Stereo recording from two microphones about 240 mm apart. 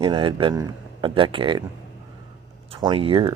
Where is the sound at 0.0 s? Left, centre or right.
Centre.